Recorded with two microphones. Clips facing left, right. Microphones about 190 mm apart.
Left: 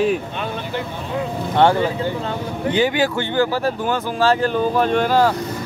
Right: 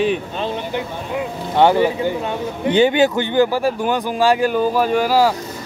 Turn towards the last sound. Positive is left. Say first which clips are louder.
# right 1 dB
turn(degrees=-5)  # may be behind; listen again after turning